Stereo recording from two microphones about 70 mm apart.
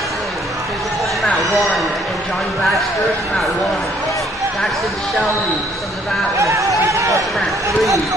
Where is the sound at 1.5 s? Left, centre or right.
Centre.